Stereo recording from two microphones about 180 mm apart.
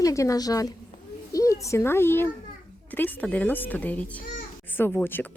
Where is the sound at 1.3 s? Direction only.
20° left (ahead or behind).